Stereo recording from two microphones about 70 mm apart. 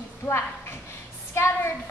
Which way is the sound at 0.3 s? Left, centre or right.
Left.